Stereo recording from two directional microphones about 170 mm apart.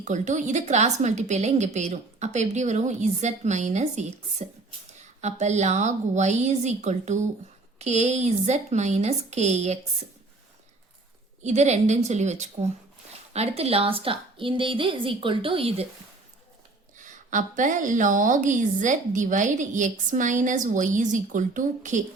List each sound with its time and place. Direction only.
0.0 s a woman's voice: 45° right (ahead or behind)
11.4 s a woman's voice: 40° right (ahead or behind)
17.0 s a woman's voice: 50° right (ahead or behind)